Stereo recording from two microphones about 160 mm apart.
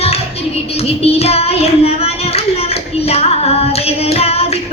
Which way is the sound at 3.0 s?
40° left (ahead or behind).